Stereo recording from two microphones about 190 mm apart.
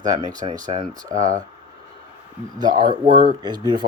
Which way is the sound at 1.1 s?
45° right (ahead or behind).